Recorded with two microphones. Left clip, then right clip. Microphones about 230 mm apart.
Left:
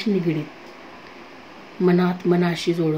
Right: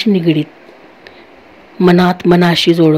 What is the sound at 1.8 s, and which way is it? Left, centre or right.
Speech, right.